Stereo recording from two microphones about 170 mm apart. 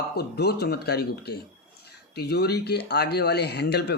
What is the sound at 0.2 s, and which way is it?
Speech, 70° left (ahead or behind).